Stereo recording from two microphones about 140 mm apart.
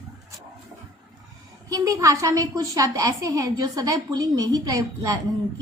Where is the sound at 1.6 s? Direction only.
25° right (ahead or behind).